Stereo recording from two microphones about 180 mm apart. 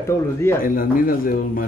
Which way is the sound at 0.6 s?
50° left (ahead or behind).